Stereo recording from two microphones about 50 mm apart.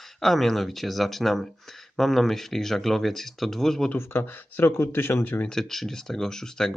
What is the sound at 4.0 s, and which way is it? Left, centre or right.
Speech, left.